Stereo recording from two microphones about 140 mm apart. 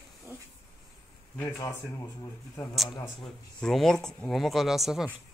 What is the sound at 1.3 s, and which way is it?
A man's voice, 20° left (ahead or behind).